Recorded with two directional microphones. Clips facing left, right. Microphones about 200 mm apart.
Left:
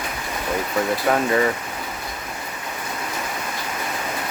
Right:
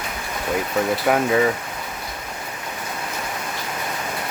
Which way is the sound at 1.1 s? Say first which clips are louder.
Right 1 dB; 5° right (ahead or behind).